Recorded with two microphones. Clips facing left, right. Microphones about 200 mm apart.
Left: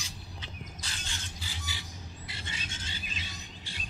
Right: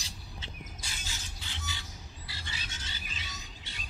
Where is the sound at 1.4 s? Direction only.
10° left (ahead or behind); by 2.9 s 30° left (ahead or behind).